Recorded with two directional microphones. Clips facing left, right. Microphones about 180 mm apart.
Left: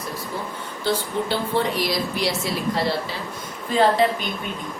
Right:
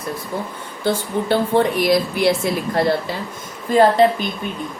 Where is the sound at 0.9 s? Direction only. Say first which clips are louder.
Right 4 dB; 50° right (ahead or behind).